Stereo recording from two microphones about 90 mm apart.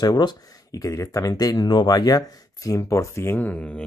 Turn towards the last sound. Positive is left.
turn(degrees=20)  # may be behind; listen again after turning